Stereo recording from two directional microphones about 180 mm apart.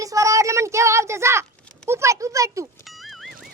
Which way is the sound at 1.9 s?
15° right (ahead or behind).